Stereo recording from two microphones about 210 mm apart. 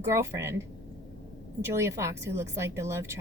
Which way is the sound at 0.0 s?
15° right (ahead or behind).